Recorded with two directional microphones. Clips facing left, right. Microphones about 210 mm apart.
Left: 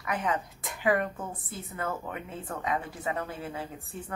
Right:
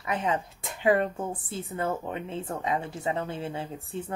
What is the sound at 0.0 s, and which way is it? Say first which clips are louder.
Speech: right 2 dB; 25° right (ahead or behind).